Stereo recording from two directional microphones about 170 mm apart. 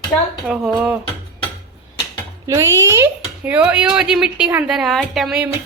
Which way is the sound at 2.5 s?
20° right (ahead or behind).